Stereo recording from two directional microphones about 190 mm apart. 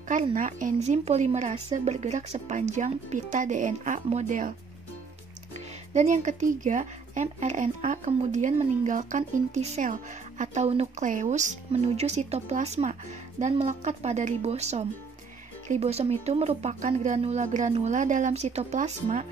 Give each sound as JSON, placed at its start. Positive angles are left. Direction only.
{"t": 0.1, "sound": "speech", "side_deg": -40}